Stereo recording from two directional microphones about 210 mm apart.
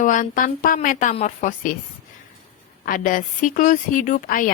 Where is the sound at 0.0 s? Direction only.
40° left (ahead or behind).